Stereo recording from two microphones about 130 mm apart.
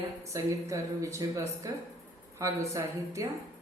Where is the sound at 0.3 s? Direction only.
25° right (ahead or behind).